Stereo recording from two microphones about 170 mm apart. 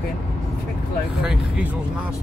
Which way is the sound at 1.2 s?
5° right (ahead or behind).